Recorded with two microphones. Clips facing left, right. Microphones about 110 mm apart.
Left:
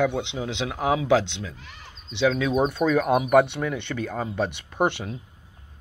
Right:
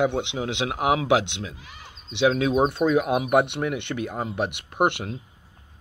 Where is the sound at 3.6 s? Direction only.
15° right (ahead or behind).